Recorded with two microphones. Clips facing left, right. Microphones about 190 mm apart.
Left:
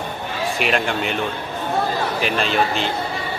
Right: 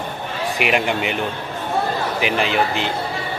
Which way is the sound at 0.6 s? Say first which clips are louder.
Right 2 dB; 15° right (ahead or behind).